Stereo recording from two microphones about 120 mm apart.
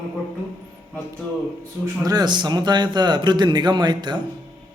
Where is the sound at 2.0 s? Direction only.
35° right (ahead or behind).